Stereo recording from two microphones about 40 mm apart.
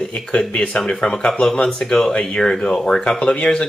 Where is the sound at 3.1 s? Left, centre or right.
Left.